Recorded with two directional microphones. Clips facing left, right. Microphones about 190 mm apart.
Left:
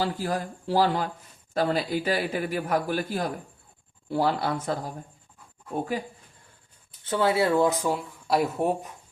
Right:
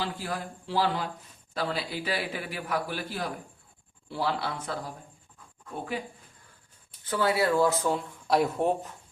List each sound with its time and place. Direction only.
0.0 s a man's voice: 40° left (ahead or behind)
7.0 s speech: 25° left (ahead or behind); by 8.9 s 10° left (ahead or behind)